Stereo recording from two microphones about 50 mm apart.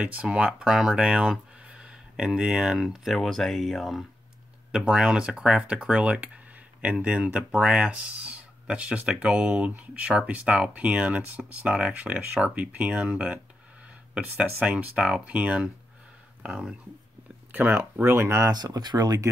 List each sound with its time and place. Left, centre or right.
0.0 s speech: right
0.5 s speech: centre
4.7 s speech: centre
5.6 s speech: right
7.3 s speech: centre
14.6 s speech: right; by 16.7 s centre
17.5 s speech: right
18.0 s speech: right